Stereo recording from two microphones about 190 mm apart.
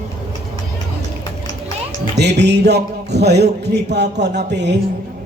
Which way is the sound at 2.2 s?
60° right (ahead or behind).